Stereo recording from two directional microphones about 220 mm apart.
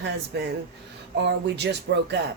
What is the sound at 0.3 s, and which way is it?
Speech, 50° right (ahead or behind).